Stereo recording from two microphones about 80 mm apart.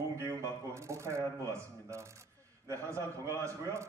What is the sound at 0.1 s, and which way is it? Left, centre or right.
Shuffling cards, right.